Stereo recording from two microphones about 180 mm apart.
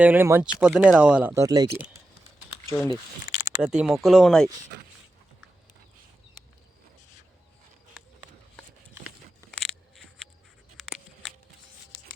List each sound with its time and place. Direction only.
0.0 s speech: 10° right (ahead or behind)
1.3 s speech: 20° right (ahead or behind)
2.6 s speech: 15° left (ahead or behind)
3.6 s speech: 5° right (ahead or behind)
9.5 s scissors: centre (ahead or behind)
10.8 s a sound: centre (ahead or behind)